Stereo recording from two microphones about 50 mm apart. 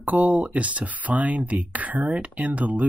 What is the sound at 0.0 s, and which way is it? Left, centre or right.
Speech, right.